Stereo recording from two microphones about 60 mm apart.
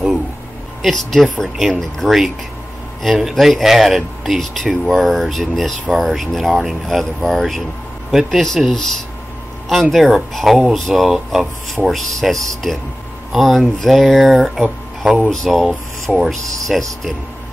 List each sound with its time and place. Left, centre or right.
0.8 s speech: centre